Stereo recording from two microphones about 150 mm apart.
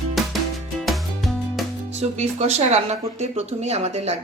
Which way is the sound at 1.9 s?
50° right (ahead or behind).